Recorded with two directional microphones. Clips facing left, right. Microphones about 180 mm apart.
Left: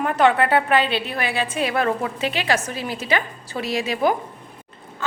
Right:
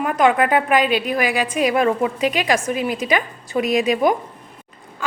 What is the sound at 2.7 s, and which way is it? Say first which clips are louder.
A woman's voice: right 4 dB; 30° left (ahead or behind).